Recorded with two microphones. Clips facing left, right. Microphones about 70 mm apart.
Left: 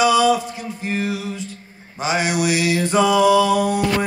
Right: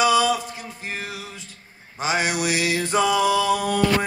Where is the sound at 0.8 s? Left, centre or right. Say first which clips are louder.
Left 9 dB; right.